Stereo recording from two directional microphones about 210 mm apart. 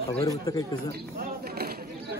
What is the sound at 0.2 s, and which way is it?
Speech, 15° left (ahead or behind).